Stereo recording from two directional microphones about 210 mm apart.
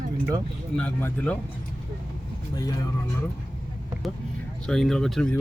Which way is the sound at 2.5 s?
15° left (ahead or behind).